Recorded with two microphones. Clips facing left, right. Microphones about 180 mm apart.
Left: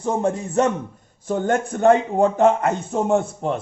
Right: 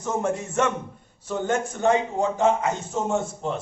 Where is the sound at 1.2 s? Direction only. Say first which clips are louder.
Left 4 dB; 50° left (ahead or behind).